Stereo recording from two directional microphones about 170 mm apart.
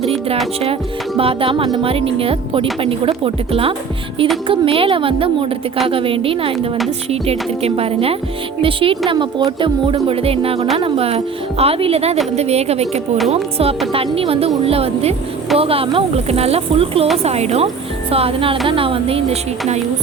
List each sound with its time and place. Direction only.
0.0 s music: 35° right (ahead or behind)
0.6 s speech: 35° right (ahead or behind)